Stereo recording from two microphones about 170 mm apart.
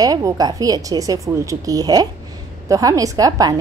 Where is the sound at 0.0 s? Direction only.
20° right (ahead or behind).